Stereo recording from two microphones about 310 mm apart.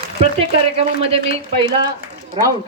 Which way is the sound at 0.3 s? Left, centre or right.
Centre.